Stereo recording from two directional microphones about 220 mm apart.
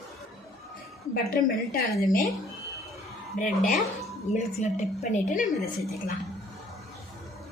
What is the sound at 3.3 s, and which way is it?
A woman's voice, 35° left (ahead or behind).